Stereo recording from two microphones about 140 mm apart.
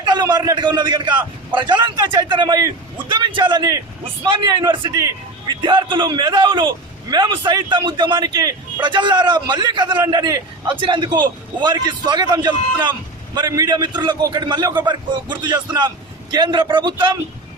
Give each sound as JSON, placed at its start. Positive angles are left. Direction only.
{"t": 0.0, "sound": "a man's voice", "side_deg": -30}